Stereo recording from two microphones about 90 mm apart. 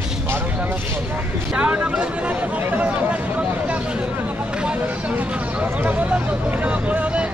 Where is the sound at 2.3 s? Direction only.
20° right (ahead or behind).